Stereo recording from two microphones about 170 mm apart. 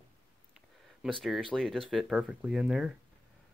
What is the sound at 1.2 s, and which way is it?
Speech, centre (ahead or behind).